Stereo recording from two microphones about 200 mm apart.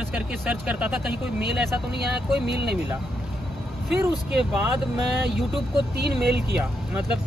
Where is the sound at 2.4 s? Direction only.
55° right (ahead or behind).